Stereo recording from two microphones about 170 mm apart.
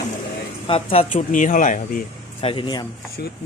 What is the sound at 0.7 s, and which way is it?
Speech, 35° left (ahead or behind).